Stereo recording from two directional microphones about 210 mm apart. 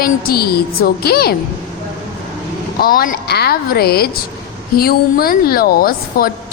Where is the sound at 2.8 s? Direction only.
45° left (ahead or behind).